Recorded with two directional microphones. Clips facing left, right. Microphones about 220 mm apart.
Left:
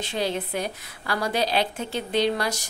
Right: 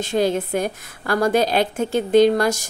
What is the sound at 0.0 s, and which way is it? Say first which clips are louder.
A woman's voice: right 8 dB; 45° right (ahead or behind).